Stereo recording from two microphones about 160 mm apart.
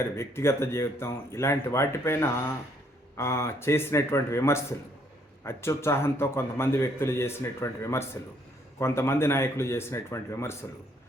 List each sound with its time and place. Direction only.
0.2 s a man's voice: 15° left (ahead or behind)